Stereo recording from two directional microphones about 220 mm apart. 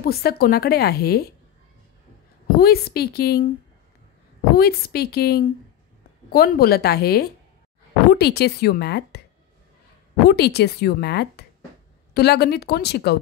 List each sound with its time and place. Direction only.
0.0 s speech: 45° left (ahead or behind)
2.4 s speech: 45° left (ahead or behind)
10.2 s speech: 45° left (ahead or behind)